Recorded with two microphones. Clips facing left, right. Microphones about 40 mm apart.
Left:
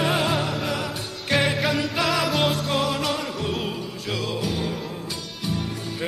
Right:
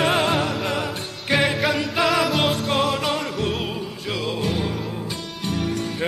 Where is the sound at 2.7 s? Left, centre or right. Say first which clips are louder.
Right 2 dB; centre.